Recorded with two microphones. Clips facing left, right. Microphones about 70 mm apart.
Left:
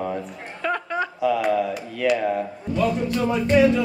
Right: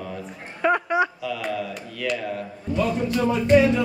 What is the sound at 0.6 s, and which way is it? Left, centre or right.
Speech, centre.